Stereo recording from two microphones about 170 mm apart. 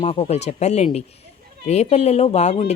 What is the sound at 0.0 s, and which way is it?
A woman's voice, 40° left (ahead or behind).